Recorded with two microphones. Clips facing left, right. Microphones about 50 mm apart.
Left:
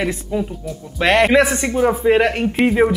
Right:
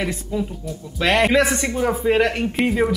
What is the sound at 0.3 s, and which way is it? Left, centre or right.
Speech, left.